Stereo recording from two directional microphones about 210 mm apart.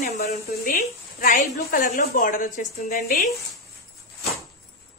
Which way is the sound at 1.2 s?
40° left (ahead or behind).